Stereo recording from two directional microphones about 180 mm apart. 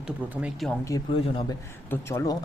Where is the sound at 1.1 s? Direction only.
30° left (ahead or behind).